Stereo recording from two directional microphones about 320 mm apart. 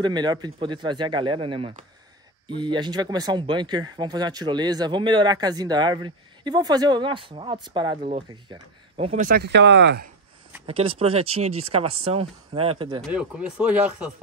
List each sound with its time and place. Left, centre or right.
0.0 s speech: centre; by 10.0 s right
10.7 s speech: centre
13.1 s speech: centre